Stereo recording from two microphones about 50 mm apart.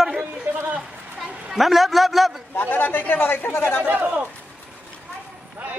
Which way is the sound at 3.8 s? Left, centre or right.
Right.